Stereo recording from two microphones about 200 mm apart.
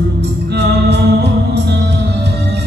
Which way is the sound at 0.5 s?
55° right (ahead or behind).